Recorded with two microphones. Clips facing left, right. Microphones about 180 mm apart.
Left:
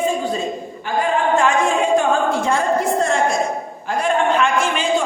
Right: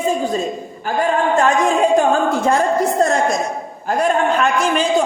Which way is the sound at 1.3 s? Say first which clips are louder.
Right 3 dB; 40° right (ahead or behind).